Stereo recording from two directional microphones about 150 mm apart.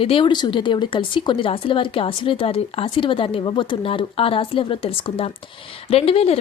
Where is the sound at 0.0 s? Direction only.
35° left (ahead or behind).